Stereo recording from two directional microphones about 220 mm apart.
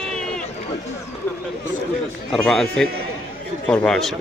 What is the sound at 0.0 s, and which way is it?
Run, 5° left (ahead or behind).